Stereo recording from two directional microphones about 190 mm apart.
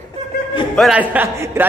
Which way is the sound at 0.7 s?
Centre (ahead or behind).